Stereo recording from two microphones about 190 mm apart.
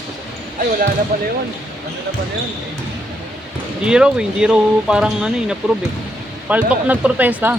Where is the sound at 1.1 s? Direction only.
50° right (ahead or behind).